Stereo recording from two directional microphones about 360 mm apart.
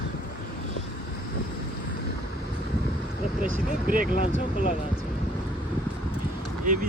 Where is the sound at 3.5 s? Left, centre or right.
Right.